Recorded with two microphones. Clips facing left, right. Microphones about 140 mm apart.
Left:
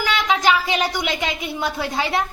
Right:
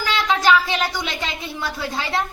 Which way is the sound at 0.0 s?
20° left (ahead or behind).